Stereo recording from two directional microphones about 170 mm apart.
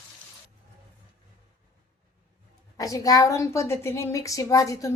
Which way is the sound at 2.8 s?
20° left (ahead or behind).